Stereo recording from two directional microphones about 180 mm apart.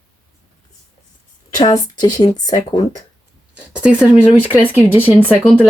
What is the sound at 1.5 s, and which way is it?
Speech, 20° left (ahead or behind).